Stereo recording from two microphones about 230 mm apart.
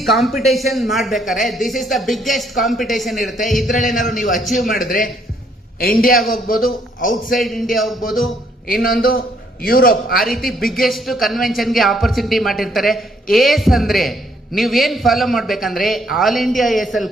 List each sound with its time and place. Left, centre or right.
0.0 s a man's voice: centre
3.7 s a man's voice: left
7.3 s a man's voice: centre
8.6 s a man's voice: left
10.7 s a man's voice: centre